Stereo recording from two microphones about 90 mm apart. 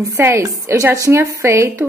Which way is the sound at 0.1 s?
30° right (ahead or behind).